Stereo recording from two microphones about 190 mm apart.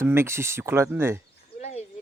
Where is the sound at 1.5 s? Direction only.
35° left (ahead or behind).